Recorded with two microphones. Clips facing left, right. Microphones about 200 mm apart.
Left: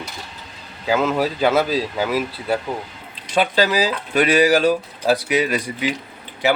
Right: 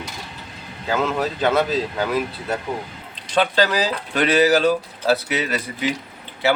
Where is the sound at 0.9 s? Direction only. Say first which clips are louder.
Left 3 dB; 10° left (ahead or behind).